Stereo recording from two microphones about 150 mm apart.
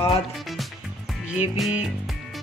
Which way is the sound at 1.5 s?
Centre (ahead or behind).